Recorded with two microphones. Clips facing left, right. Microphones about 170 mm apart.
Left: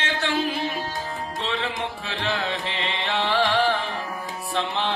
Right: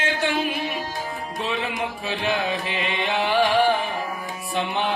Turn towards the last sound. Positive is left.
turn(degrees=-15)  # may be behind; listen again after turning